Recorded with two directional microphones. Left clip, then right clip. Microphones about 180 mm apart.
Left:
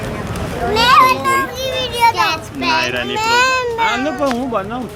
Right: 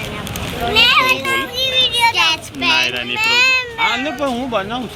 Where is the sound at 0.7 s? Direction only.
50° left (ahead or behind).